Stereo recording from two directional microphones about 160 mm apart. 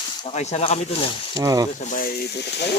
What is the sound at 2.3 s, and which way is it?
Speech, 90° left.